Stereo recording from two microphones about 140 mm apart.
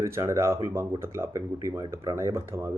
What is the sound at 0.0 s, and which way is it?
Speech, 20° right (ahead or behind).